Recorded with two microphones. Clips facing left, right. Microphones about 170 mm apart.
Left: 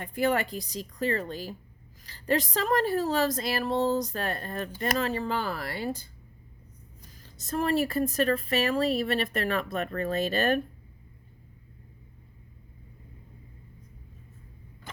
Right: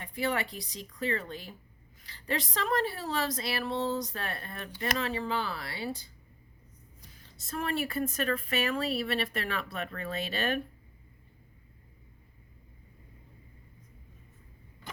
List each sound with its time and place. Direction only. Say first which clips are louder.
0.0 s speech: left 5 dB; 50° left (ahead or behind)
7.2 s speech: left 6 dB; 40° left (ahead or behind)